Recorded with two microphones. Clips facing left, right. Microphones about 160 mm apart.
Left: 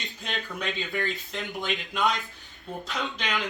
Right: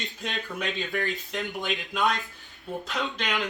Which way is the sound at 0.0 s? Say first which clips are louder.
Right 1 dB; centre (ahead or behind).